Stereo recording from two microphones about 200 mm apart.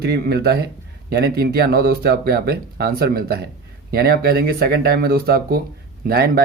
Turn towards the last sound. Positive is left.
turn(degrees=-50)  # may be behind; listen again after turning